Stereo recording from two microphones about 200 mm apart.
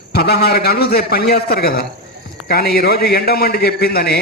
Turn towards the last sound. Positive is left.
turn(degrees=50)  # may be behind; listen again after turning